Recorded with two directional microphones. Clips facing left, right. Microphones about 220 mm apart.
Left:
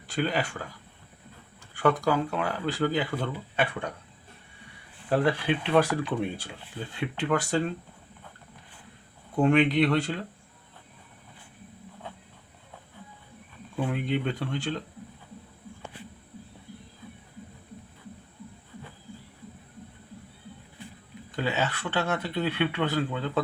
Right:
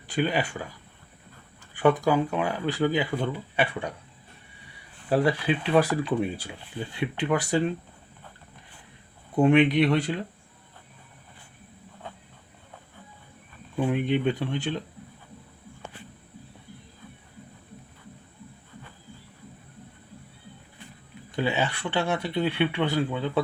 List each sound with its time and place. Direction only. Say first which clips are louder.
0.1 s speech: right 2 dB; 15° right (ahead or behind)
1.8 s speech: right 3 dB; 20° right (ahead or behind)
5.0 s speech: right 1 dB; 10° right (ahead or behind)
9.3 s speech: right 3 dB; 10° right (ahead or behind)
13.7 s speech: right 4 dB; 15° right (ahead or behind)
21.3 s speech: right 2 dB; 15° right (ahead or behind)